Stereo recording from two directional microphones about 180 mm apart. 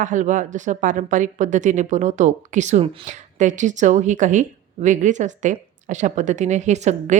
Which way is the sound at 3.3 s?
45° right (ahead or behind).